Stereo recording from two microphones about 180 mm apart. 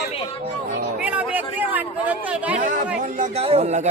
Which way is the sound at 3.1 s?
45° right (ahead or behind).